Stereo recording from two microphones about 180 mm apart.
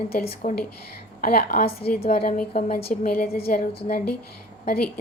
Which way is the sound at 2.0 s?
35° left (ahead or behind).